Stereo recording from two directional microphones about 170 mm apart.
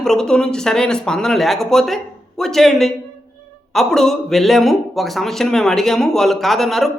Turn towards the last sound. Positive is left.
turn(degrees=0)  # may be behind; listen again after turning